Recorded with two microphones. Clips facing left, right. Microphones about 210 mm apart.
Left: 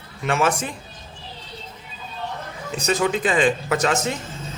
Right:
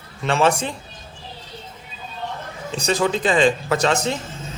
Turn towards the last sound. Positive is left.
turn(degrees=-30)  # may be behind; listen again after turning